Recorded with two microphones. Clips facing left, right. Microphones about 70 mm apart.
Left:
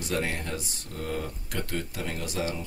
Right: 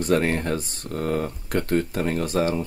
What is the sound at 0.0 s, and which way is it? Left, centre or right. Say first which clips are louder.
Speech: right 9 dB; right.